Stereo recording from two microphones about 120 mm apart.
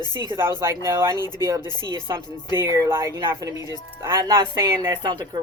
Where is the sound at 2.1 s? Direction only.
35° right (ahead or behind).